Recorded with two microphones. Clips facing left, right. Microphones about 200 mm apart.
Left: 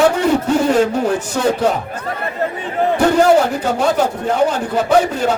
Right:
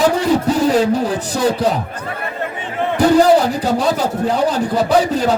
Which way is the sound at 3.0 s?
35° right (ahead or behind).